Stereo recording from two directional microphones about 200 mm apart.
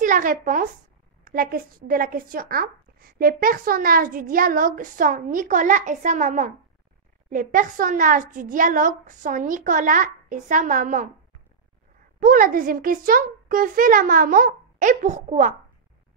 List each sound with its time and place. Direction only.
0.0 s a woman's voice: 40° right (ahead or behind)
12.2 s speech: 45° right (ahead or behind)